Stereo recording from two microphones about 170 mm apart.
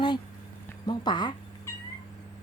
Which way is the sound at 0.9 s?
25° left (ahead or behind).